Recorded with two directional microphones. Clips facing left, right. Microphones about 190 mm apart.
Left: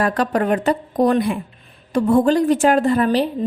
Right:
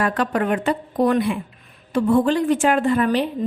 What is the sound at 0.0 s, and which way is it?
A woman's voice, 40° left (ahead or behind).